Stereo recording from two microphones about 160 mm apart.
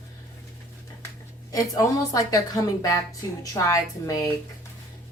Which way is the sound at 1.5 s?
20° left (ahead or behind).